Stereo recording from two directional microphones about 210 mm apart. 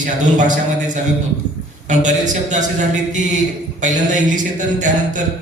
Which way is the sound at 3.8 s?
35° right (ahead or behind).